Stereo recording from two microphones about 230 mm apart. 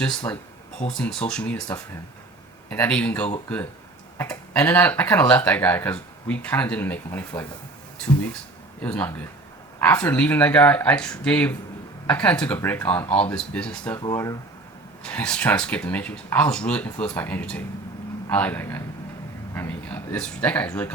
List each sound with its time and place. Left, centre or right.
0.0 s speech: centre
15.0 s speech: centre